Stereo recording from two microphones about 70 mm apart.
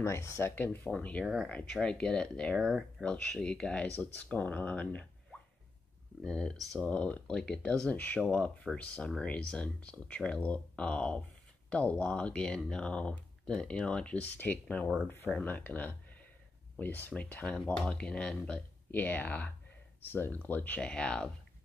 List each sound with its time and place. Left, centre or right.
0.0 s speech: left
0.6 s speech: left
1.2 s speech: centre
1.7 s speech: centre
2.5 s speech: centre
3.0 s speech: centre
6.2 s speech: centre